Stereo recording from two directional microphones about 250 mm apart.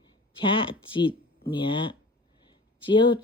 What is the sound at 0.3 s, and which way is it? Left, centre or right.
Speech, centre.